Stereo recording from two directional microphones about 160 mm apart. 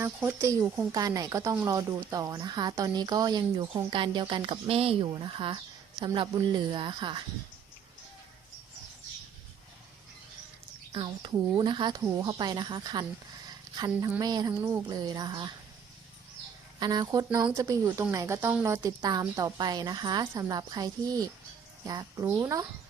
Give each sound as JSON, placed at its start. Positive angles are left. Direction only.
{"t": 0.0, "sound": "speech", "side_deg": -15}
{"t": 10.9, "sound": "speech", "side_deg": -30}
{"t": 16.8, "sound": "a woman's voice", "side_deg": -25}